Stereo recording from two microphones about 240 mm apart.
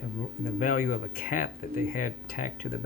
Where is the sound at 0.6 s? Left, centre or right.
Left.